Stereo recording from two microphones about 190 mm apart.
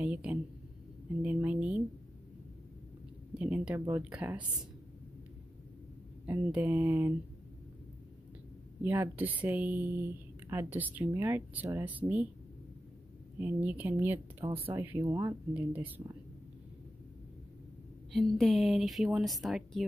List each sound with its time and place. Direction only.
0.0 s speech: 5° right (ahead or behind)
3.3 s speech: 5° right (ahead or behind)
6.2 s speech: 10° right (ahead or behind)
8.8 s speech: 10° right (ahead or behind)
13.4 s speech: 10° right (ahead or behind)
14.4 s speech: 30° right (ahead or behind)
14.7 s speech: 10° right (ahead or behind)
18.1 s a woman's voice: centre (ahead or behind)